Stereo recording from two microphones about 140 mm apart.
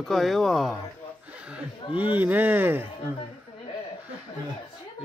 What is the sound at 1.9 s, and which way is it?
Speech, 10° right (ahead or behind).